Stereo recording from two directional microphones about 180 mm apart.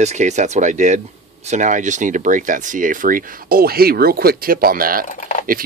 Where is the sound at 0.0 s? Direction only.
40° right (ahead or behind).